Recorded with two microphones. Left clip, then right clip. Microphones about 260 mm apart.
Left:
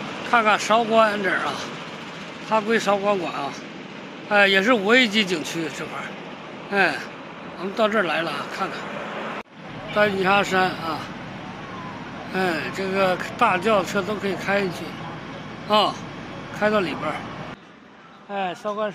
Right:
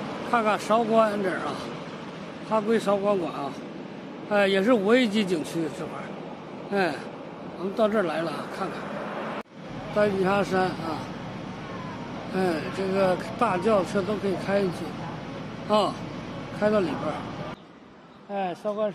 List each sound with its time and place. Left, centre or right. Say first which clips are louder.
0.3 s speech: left 5 dB; centre
2.5 s speech: left 3 dB; centre
6.7 s speech: left 6 dB; centre
9.1 s vehicle: left 2 dB; left
9.9 s speech: left 4 dB; centre
12.4 s speech: left 3 dB; centre
18.3 s speech: left 2 dB; centre